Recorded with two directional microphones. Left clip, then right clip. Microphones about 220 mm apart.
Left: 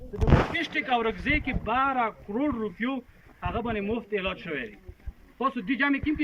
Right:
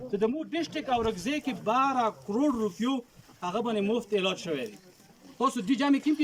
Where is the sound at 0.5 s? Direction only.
15° right (ahead or behind).